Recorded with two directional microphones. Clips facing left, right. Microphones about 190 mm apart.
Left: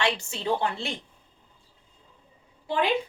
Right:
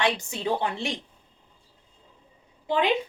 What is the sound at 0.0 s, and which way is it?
Speech, 15° right (ahead or behind).